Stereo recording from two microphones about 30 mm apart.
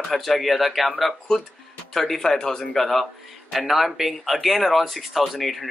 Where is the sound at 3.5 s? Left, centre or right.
Centre.